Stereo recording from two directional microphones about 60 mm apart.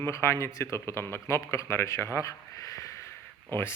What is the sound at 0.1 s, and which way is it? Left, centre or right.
Speech, left.